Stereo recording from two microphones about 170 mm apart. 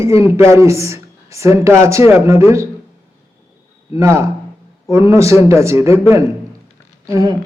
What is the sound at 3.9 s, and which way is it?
A man's voice, 15° right (ahead or behind).